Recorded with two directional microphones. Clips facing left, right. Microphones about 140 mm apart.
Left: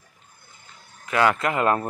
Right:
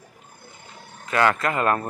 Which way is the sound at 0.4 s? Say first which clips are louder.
Right 7 dB; 75° right (ahead or behind).